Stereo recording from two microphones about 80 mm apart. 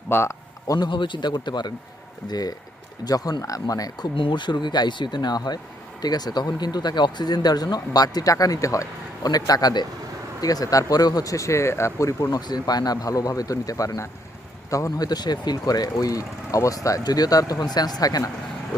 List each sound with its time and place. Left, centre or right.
0.1 s a man's voice: left
0.9 s speech: left
12.3 s speech: left